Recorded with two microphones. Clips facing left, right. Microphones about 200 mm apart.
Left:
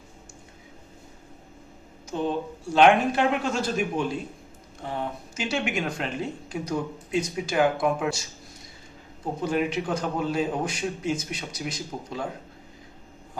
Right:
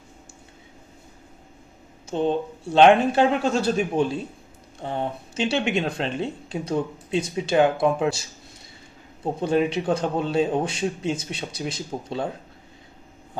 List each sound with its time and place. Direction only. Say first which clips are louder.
2.0 s a man's voice: right 4 dB; 30° right (ahead or behind)
9.4 s speech: right 4 dB; 25° right (ahead or behind)